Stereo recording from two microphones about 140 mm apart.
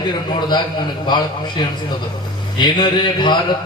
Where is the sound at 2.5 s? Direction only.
35° left (ahead or behind).